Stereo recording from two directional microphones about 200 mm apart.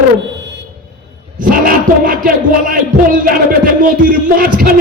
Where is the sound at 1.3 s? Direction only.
45° right (ahead or behind).